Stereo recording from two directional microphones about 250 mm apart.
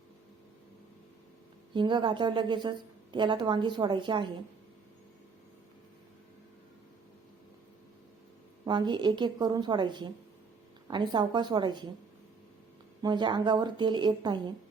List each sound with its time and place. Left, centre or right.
1.7 s a woman's voice: centre
8.6 s a woman's voice: centre
13.0 s a woman's voice: centre